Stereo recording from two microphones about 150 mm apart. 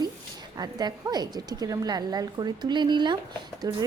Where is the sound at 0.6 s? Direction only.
25° right (ahead or behind).